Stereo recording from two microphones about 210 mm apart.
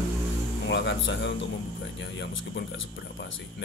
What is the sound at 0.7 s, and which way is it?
Speech, 60° left (ahead or behind).